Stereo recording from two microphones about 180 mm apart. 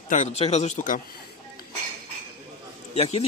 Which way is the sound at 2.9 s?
35° left (ahead or behind).